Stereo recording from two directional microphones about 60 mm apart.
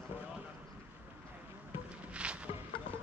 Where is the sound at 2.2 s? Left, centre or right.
Centre.